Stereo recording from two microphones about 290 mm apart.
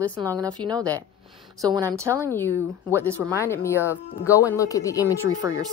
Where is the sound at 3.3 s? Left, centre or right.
Centre.